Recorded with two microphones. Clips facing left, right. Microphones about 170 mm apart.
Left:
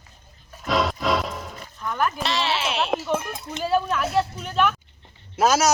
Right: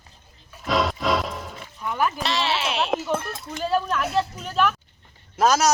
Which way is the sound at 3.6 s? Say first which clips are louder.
Left 1 dB; 5° left (ahead or behind).